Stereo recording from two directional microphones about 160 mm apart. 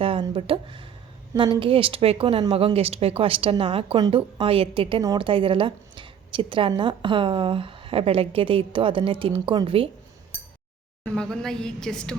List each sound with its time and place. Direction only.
0.0 s a sound: 35° right (ahead or behind)
1.5 s speech: 35° right (ahead or behind)
11.0 s a woman's voice: 5° left (ahead or behind)